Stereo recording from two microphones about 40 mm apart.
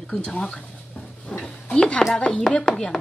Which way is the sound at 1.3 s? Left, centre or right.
Left.